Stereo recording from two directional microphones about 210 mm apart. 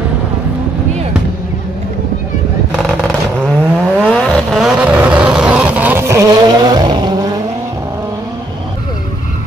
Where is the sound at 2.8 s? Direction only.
5° left (ahead or behind); by 7.4 s 20° right (ahead or behind).